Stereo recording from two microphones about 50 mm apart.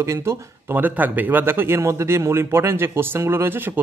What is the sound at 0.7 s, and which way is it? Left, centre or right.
Speech, right.